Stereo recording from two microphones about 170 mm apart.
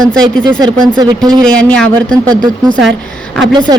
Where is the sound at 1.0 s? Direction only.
25° right (ahead or behind).